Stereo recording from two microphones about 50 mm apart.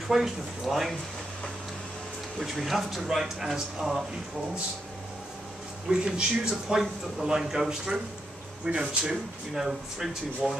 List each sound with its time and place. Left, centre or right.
0.1 s speech: centre
2.3 s speech: centre
5.9 s speech: centre